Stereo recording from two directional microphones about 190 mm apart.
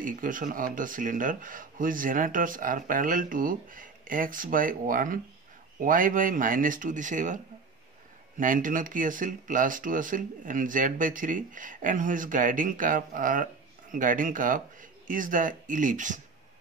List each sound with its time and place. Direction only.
0.0 s speech: 45° right (ahead or behind)
8.4 s speech: 45° right (ahead or behind)